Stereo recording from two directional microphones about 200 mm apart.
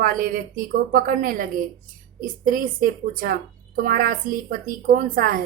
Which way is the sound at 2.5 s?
45° right (ahead or behind).